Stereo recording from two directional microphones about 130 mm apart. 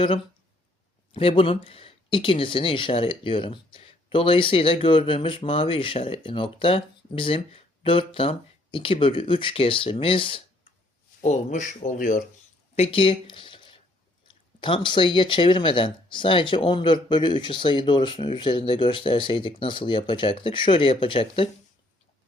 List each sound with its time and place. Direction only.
1.1 s speech: 45° left (ahead or behind)
11.2 s speech: 65° left (ahead or behind); by 12.2 s 90° left
12.7 s speech: 50° left (ahead or behind)